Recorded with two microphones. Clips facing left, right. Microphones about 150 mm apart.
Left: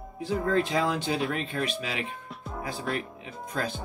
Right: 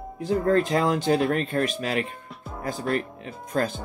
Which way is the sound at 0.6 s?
45° right (ahead or behind).